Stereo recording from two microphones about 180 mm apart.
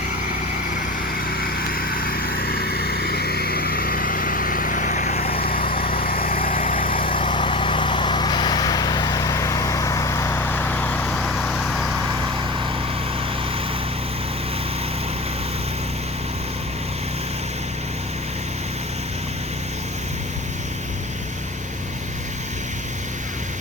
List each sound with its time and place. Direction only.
1.4 s vehicle: 55° left (ahead or behind)
7.2 s vehicle: 30° left (ahead or behind); by 11.9 s centre (ahead or behind)